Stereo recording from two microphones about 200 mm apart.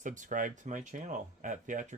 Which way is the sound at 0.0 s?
40° right (ahead or behind).